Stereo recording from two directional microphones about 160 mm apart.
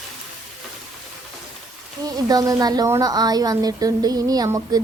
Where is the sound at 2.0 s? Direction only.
20° right (ahead or behind).